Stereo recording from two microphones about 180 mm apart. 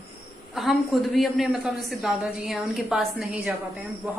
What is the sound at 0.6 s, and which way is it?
A woman's voice, centre (ahead or behind).